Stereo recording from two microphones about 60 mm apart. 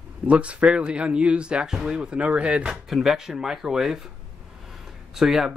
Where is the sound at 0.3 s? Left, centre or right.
Right.